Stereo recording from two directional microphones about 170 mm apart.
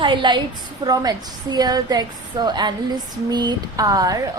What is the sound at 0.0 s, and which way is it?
A woman's voice, 30° right (ahead or behind).